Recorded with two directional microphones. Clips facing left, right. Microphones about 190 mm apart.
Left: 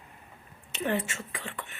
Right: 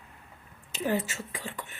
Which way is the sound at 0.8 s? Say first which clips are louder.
Right 1 dB; 5° right (ahead or behind).